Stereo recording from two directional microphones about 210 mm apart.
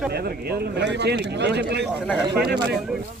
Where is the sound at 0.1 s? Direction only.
50° right (ahead or behind).